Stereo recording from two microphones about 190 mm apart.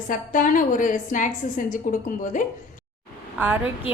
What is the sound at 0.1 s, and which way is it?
A woman's voice, 45° left (ahead or behind).